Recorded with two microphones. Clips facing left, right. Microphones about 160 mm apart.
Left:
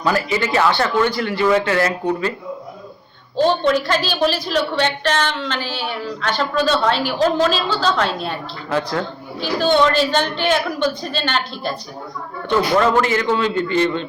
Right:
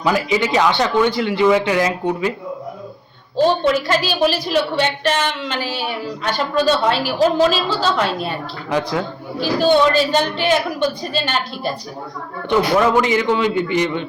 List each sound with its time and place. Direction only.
0.0 s a woman's voice: 15° right (ahead or behind)
3.3 s a woman's voice: 5° right (ahead or behind)